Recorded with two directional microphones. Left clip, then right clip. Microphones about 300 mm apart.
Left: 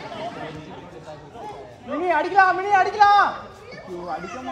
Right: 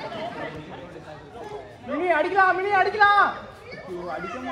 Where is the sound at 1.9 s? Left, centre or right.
Centre.